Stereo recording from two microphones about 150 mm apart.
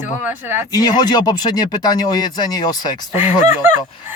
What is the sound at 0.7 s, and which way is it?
Speech, 25° left (ahead or behind).